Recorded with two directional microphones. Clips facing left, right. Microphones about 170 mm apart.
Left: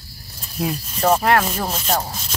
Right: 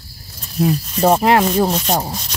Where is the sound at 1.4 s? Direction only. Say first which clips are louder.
Right 8 dB; 30° right (ahead or behind).